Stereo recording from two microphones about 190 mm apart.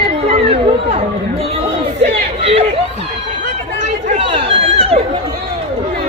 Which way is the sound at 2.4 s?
30° right (ahead or behind).